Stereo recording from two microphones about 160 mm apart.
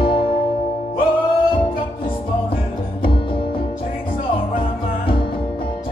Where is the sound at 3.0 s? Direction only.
35° left (ahead or behind).